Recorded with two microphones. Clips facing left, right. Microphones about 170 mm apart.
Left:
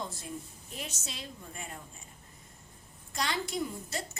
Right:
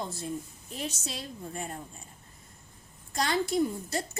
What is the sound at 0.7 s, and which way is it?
Speech, 35° right (ahead or behind).